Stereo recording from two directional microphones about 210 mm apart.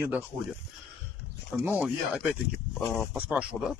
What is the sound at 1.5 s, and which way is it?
Speech, 5° right (ahead or behind).